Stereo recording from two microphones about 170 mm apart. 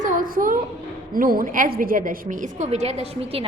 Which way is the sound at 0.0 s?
50° right (ahead or behind).